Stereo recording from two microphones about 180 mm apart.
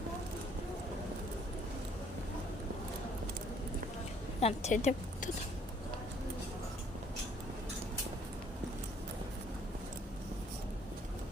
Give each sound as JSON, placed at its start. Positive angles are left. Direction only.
{"t": 4.4, "sound": "a woman's voice", "side_deg": 35}